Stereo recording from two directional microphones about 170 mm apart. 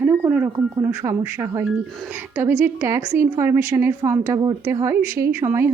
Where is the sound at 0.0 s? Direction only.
10° right (ahead or behind).